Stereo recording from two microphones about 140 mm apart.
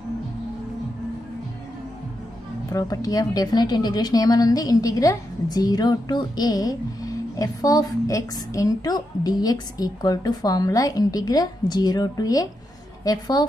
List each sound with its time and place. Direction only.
2.7 s a woman's voice: 25° left (ahead or behind)